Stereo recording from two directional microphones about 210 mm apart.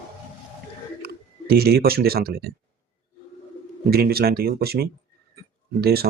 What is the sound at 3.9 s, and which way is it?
Speech, 45° right (ahead or behind).